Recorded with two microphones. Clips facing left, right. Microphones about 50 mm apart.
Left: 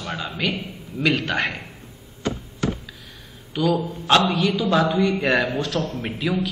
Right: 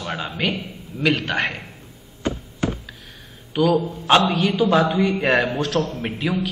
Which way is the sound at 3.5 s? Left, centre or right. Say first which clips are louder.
Right 3 dB; centre.